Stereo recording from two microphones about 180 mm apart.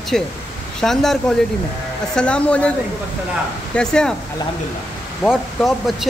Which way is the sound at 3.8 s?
5° left (ahead or behind).